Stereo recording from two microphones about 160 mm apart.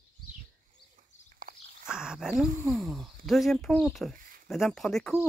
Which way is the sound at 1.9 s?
5° right (ahead or behind).